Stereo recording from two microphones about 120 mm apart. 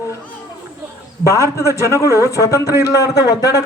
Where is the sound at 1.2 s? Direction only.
25° left (ahead or behind).